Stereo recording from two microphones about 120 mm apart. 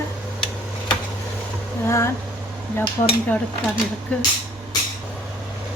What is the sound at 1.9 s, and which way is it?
Speech, 25° left (ahead or behind).